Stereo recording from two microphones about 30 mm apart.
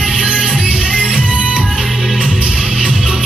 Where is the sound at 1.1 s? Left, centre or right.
Right.